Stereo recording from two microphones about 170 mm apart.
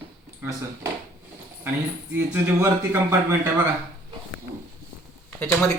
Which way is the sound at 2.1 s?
15° right (ahead or behind).